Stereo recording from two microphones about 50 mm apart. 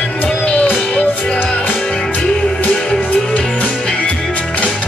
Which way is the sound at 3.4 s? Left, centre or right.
Left.